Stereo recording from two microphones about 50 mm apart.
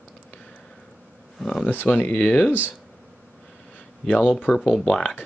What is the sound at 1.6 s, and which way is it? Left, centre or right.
Speech, left.